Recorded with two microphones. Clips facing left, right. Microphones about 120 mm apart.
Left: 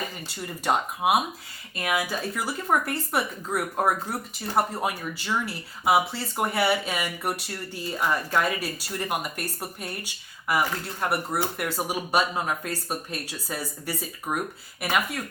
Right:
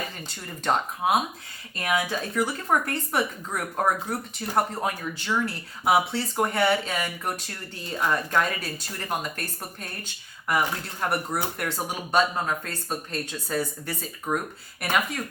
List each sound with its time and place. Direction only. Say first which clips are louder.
0.3 s speech: even; 10° left (ahead or behind)